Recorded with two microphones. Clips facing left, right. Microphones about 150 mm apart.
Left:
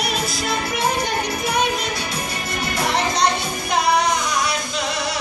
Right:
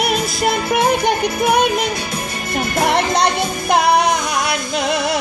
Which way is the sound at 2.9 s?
60° right (ahead or behind).